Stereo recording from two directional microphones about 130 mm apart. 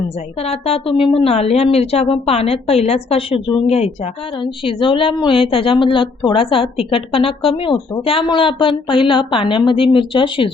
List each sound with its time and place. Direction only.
0.1 s a woman's voice: 50° left (ahead or behind)